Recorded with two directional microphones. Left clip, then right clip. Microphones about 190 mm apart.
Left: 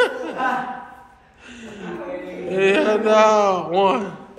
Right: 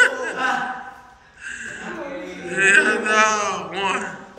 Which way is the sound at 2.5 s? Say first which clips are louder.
Right 2 dB; 15° left (ahead or behind).